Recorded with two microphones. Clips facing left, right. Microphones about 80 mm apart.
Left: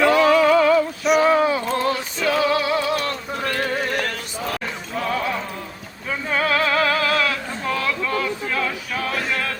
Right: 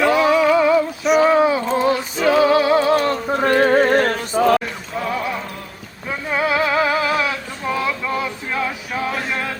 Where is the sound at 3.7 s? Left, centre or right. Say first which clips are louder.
Right 9 dB; right.